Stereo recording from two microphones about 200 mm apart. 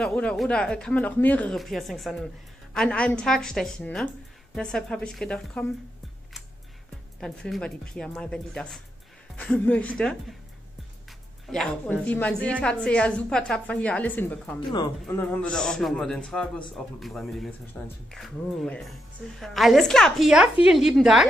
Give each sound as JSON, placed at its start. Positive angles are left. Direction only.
{"t": 0.0, "sound": "speech", "side_deg": 5}
{"t": 7.2, "sound": "a woman's voice", "side_deg": 0}